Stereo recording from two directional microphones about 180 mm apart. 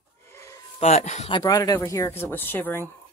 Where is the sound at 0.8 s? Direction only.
40° left (ahead or behind).